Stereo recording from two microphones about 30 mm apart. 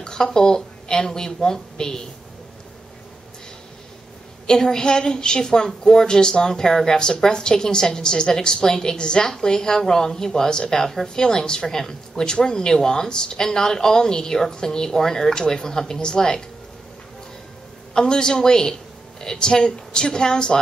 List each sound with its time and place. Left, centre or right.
0.0 s a woman's voice: left
4.5 s a woman's voice: centre
17.9 s speech: left